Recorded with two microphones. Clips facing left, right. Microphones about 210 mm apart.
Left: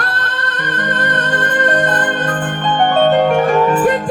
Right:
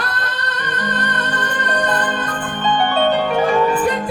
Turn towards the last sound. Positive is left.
turn(degrees=50)  # may be behind; listen again after turning